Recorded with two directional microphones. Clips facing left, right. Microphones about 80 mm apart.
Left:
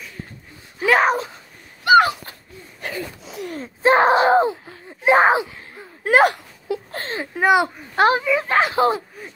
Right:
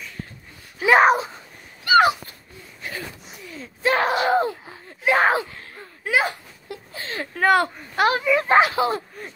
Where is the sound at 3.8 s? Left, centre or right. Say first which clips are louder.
Left 6 dB; left; by 5.9 s centre.